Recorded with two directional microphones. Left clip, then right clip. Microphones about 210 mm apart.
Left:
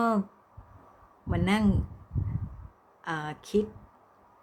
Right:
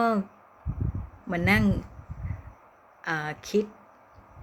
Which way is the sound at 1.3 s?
10° left (ahead or behind).